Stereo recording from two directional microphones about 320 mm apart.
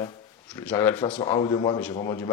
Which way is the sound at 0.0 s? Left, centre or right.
Centre.